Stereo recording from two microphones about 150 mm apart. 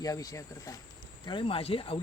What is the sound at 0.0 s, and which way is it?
Speech, 25° left (ahead or behind).